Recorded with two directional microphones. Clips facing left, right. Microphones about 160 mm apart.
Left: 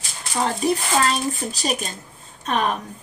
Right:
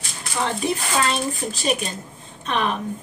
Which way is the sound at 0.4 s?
40° left (ahead or behind).